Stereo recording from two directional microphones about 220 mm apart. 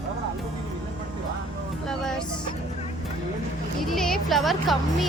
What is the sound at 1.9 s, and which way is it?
Speech, centre (ahead or behind).